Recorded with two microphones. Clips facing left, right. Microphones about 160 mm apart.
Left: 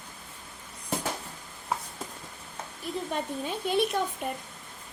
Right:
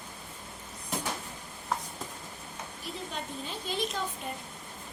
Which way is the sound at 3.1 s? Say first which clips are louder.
Left 6 dB; 55° left (ahead or behind).